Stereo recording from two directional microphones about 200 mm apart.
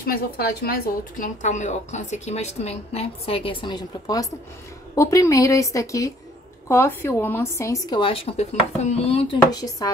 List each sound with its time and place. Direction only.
0.0 s a woman's voice: 50° left (ahead or behind); by 9.9 s 20° left (ahead or behind)